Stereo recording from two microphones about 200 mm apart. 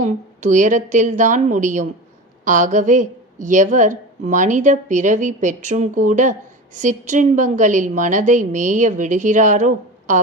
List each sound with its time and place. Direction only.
0.0 s a woman's voice: 40° right (ahead or behind)